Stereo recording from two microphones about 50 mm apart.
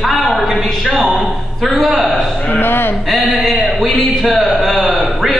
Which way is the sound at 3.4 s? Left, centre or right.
Centre.